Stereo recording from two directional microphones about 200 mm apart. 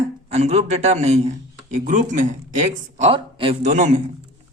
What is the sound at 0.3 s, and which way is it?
A man's voice, 35° right (ahead or behind).